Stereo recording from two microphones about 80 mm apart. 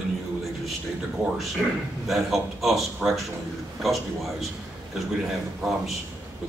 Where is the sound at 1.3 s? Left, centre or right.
Centre.